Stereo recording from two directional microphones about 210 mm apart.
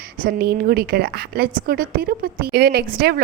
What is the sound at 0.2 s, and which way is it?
A woman's voice, 45° right (ahead or behind).